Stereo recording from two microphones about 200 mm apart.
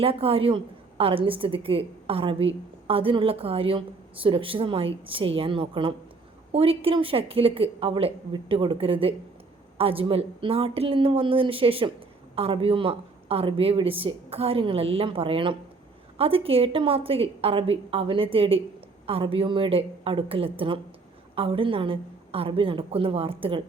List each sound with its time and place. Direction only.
0.0 s a woman's voice: 30° right (ahead or behind)